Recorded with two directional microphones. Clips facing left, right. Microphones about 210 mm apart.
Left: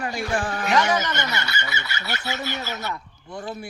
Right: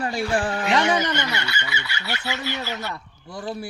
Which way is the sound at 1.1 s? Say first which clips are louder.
Right 1 dB; 45° left (ahead or behind).